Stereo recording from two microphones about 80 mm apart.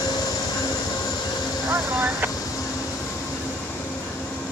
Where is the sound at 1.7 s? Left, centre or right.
Right.